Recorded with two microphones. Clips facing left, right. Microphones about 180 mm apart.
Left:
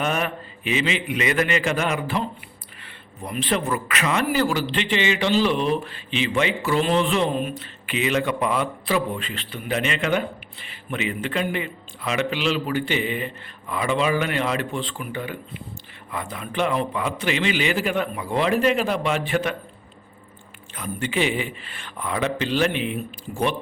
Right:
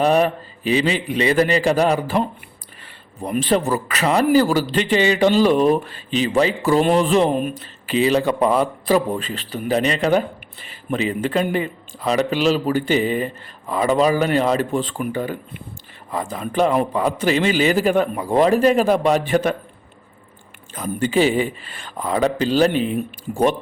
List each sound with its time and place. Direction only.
0.0 s speech: 35° right (ahead or behind)
3.2 s speech: 40° right (ahead or behind)
20.7 s speech: 40° right (ahead or behind)